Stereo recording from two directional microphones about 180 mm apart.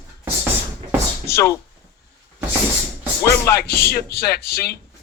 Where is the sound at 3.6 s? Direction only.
60° left (ahead or behind).